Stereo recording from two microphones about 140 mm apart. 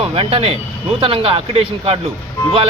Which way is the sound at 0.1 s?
45° right (ahead or behind).